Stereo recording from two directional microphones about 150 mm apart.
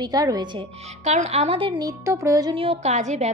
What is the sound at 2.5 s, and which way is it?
Speech, 40° right (ahead or behind).